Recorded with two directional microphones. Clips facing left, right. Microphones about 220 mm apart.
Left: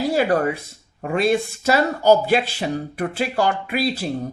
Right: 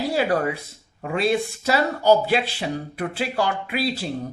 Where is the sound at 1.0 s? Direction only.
45° left (ahead or behind).